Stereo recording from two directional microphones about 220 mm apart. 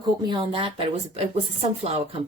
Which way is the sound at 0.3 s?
20° right (ahead or behind).